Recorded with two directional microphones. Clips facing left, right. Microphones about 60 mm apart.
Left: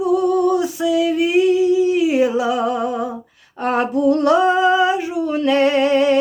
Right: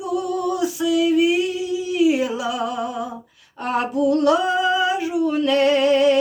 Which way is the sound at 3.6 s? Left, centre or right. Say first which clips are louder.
Left 3 dB; left.